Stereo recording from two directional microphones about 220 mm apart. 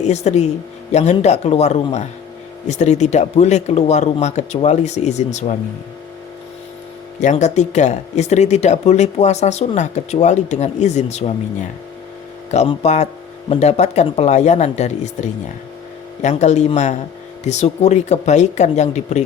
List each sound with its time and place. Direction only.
0.0 s speech: 30° left (ahead or behind)
7.2 s speech: 35° left (ahead or behind)
12.5 s speech: 30° left (ahead or behind)